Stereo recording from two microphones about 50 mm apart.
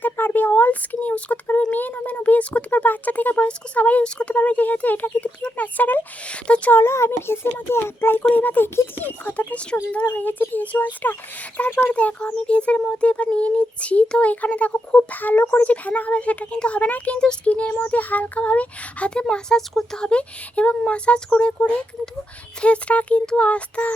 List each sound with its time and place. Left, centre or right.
0.0 s speech: left
6.2 s speech: left
6.8 s a child's voice: left
8.2 s speech: left
10.1 s speech: left
17.9 s speech: left
19.3 s speech: centre; by 23.9 s left